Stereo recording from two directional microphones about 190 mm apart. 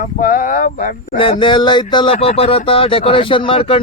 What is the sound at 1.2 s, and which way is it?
Speech, 25° left (ahead or behind).